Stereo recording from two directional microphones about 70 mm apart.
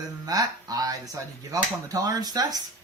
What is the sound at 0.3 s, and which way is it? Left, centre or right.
Speech, right.